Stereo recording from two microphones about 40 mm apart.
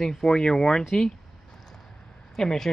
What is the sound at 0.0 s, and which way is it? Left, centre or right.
Speech, centre.